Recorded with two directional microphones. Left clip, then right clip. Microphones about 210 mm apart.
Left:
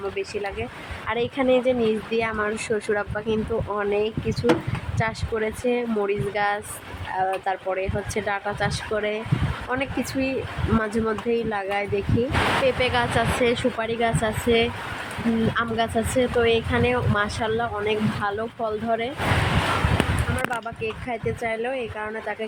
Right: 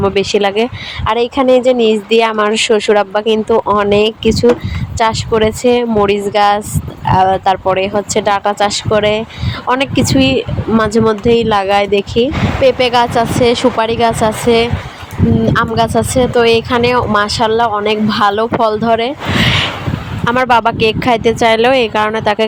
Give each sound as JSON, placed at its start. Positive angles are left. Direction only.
{"t": 0.2, "sound": "speech", "side_deg": -40}
{"t": 20.5, "sound": "speech", "side_deg": -45}